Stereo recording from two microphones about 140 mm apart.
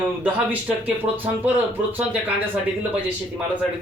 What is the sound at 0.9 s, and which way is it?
Speech, 15° right (ahead or behind).